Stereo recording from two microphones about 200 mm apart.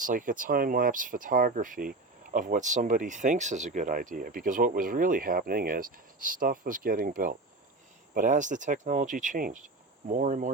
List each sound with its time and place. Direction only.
0.0 s speech: 40° right (ahead or behind)